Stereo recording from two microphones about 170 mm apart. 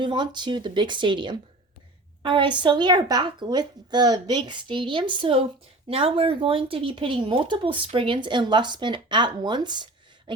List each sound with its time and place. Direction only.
0.0 s speech: 25° right (ahead or behind)